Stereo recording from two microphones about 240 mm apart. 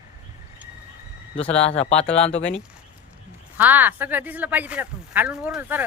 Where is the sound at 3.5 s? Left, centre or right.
Centre.